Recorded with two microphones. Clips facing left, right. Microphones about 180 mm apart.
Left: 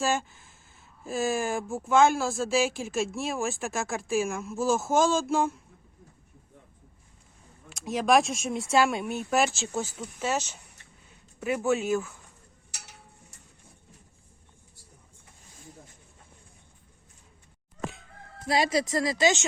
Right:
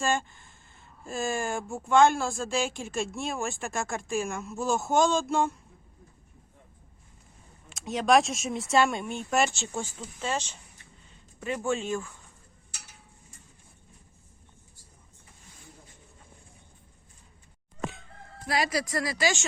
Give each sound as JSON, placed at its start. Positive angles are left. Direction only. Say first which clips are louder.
{"t": 0.0, "sound": "speech", "louder": "left 1 dB", "side_deg": 5}
{"t": 7.7, "sound": "speech", "louder": "even", "side_deg": 0}
{"t": 18.4, "sound": "speech", "louder": "left 3 dB", "side_deg": 25}